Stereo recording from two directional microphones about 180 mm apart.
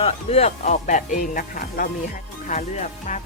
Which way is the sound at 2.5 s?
40° left (ahead or behind).